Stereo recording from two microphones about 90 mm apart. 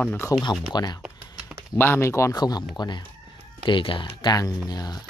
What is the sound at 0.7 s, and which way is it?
Speech, 50° left (ahead or behind).